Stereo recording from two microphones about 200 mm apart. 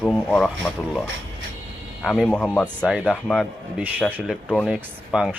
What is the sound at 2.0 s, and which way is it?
A man's voice, centre (ahead or behind).